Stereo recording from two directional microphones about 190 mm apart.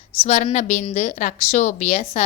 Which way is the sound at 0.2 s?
35° left (ahead or behind).